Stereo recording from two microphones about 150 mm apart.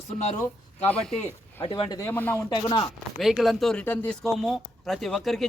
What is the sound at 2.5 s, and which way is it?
Speech, 30° left (ahead or behind).